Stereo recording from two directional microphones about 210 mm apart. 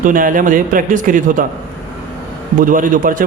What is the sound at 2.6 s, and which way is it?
Speech, 40° right (ahead or behind).